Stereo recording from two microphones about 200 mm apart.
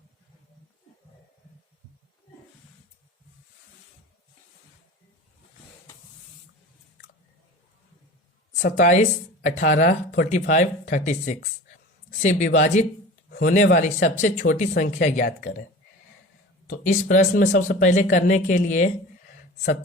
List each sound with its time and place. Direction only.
8.6 s speech: 40° left (ahead or behind)
16.6 s speech: 40° left (ahead or behind)